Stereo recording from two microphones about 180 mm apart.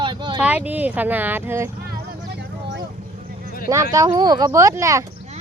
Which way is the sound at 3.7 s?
20° right (ahead or behind).